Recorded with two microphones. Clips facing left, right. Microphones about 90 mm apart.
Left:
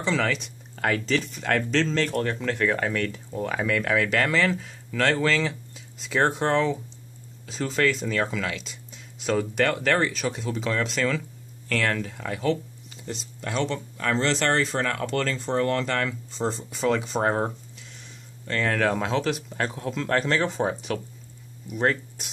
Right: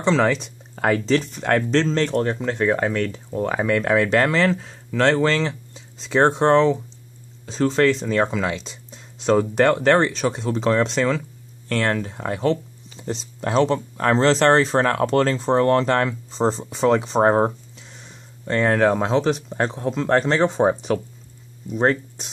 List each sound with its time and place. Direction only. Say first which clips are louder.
0.0 s speech: right 7 dB; 30° right (ahead or behind)
1.1 s speech: right 5 dB; 35° right (ahead or behind)
1.9 s speech: right 5 dB; 25° right (ahead or behind)
18.5 s speech: right 6 dB; 30° right (ahead or behind)